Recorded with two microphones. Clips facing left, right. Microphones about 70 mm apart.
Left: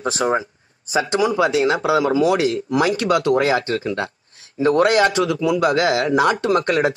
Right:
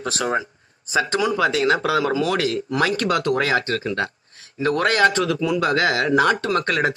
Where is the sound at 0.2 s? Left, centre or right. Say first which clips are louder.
Left 3 dB; centre.